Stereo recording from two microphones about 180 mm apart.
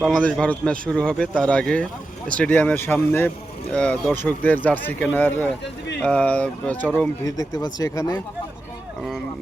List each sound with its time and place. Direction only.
0.1 s a man's voice: 5° left (ahead or behind)
7.3 s speech: 20° left (ahead or behind)